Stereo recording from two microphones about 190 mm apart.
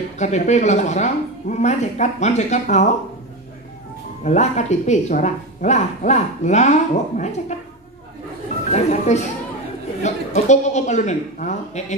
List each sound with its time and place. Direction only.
0.2 s speech: 35° left (ahead or behind)
4.2 s speech: 40° left (ahead or behind)
8.7 s speech: 35° left (ahead or behind)